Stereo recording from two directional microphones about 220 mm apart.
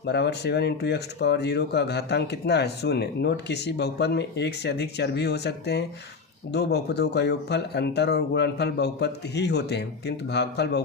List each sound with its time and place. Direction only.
0.0 s speech: 50° left (ahead or behind)